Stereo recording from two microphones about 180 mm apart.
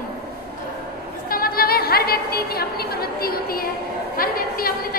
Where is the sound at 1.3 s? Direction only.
55° left (ahead or behind).